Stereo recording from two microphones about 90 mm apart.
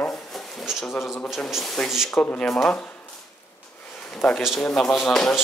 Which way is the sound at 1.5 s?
5° left (ahead or behind).